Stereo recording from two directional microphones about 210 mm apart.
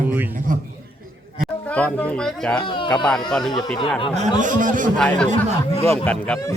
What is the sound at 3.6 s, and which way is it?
Speech, centre (ahead or behind).